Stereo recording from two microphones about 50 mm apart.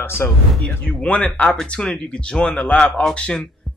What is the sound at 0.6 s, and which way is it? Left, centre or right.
Speech, left.